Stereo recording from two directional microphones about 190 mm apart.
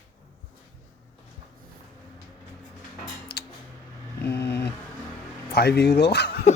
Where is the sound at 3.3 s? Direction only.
60° left (ahead or behind).